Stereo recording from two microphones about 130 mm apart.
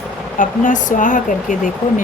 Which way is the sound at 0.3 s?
85° left.